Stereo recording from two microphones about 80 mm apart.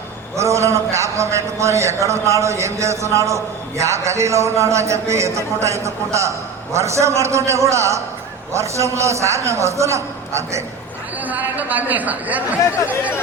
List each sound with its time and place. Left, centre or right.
0.3 s a man's voice: right
11.3 s a man's voice: right